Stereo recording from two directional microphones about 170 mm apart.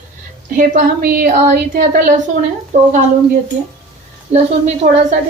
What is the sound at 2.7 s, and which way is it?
Speech, 45° right (ahead or behind).